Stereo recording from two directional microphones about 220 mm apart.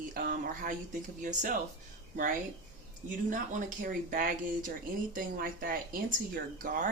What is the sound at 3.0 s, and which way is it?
Speech, 35° right (ahead or behind).